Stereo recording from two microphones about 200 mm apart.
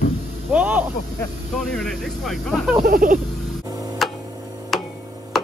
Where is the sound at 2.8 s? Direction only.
45° right (ahead or behind).